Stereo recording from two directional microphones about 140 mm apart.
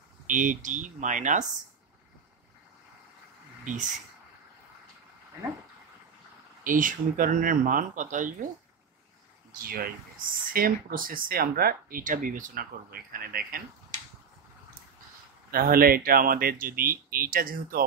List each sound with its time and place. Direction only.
0.3 s speech: 70° right (ahead or behind)
6.6 s speech: 70° right (ahead or behind)
9.5 s speech: 90° right
15.5 s speech: 90° right